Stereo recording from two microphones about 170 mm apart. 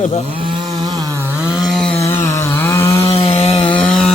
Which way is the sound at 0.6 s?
25° right (ahead or behind).